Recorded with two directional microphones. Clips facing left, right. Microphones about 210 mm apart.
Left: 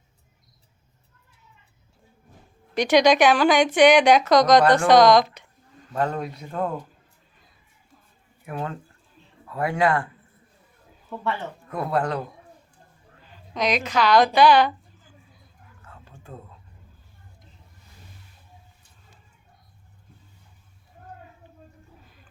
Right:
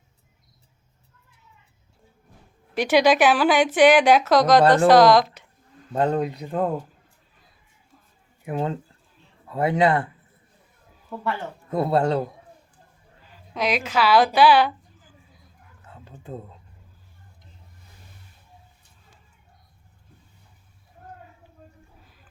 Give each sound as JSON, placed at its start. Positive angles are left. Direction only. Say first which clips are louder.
{"t": 2.7, "sound": "speech", "louder": "left 1 dB", "side_deg": -5}
{"t": 5.9, "sound": "speech", "louder": "right 3 dB", "side_deg": -30}
{"t": 6.1, "sound": "a woman's voice", "louder": "right 4 dB", "side_deg": -20}
{"t": 8.4, "sound": "speech", "louder": "right 5 dB", "side_deg": -25}
{"t": 11.7, "sound": "speech", "louder": "right 4 dB", "side_deg": -25}
{"t": 13.5, "sound": "a woman's voice", "louder": "even", "side_deg": -5}
{"t": 15.9, "sound": "a sound", "louder": "right 6 dB", "side_deg": -20}